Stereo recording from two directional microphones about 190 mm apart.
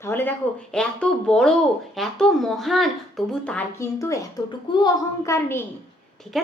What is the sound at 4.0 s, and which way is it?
A woman's voice, 15° left (ahead or behind).